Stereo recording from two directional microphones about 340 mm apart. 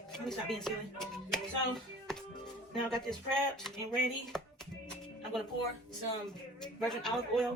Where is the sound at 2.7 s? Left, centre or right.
Centre.